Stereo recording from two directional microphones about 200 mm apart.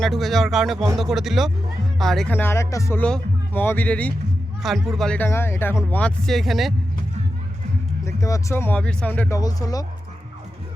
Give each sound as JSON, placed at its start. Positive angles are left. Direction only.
{"t": 0.0, "sound": "speech", "side_deg": 0}
{"t": 8.0, "sound": "speech", "side_deg": 15}
{"t": 9.4, "sound": "speech", "side_deg": 20}